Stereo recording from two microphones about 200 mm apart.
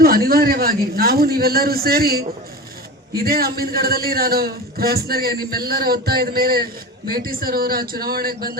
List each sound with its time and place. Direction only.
0.0 s a man's voice: 50° right (ahead or behind)